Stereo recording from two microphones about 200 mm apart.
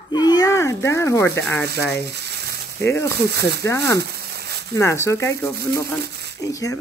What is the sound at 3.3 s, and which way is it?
Speech, 55° right (ahead or behind).